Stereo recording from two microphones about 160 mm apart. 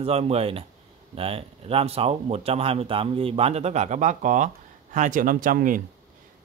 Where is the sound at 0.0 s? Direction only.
40° right (ahead or behind).